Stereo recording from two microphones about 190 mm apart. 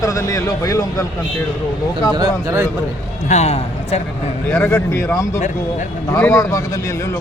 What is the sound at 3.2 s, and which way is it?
Speech, 35° left (ahead or behind).